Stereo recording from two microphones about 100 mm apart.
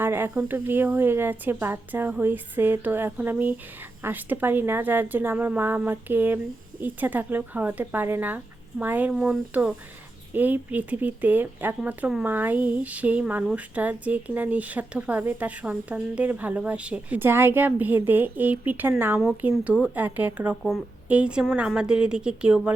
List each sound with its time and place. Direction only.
0.0 s a sound: 20° right (ahead or behind)
0.4 s a woman's voice: 20° right (ahead or behind)
9.1 s speech: 5° right (ahead or behind)
10.3 s a woman's voice: 15° right (ahead or behind)